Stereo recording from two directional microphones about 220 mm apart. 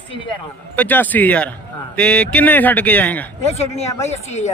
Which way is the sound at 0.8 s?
10° left (ahead or behind).